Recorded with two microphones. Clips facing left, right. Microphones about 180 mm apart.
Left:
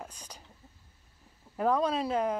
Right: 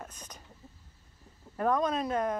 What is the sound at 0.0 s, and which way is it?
Speech, 10° left (ahead or behind).